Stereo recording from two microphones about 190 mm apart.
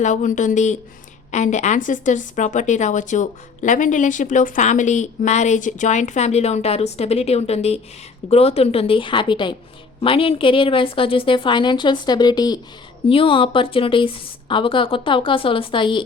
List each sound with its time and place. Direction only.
0.0 s a woman's voice: 40° left (ahead or behind)